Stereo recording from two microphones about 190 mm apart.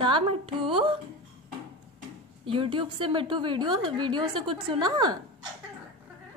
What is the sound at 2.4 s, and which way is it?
A woman's voice, 25° right (ahead or behind).